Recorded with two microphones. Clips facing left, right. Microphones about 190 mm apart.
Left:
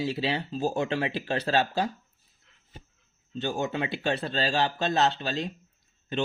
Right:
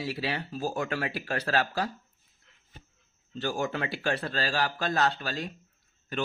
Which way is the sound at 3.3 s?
20° left (ahead or behind).